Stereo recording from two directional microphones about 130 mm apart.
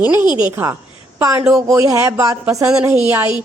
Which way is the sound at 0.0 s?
15° right (ahead or behind).